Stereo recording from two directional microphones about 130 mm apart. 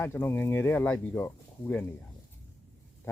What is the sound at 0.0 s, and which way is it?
Speech, 20° left (ahead or behind).